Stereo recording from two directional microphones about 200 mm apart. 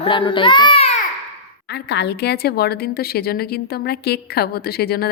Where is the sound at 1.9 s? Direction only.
55° left (ahead or behind).